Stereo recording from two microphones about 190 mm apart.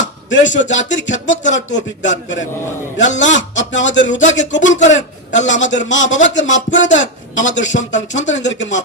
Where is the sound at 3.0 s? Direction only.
75° left (ahead or behind).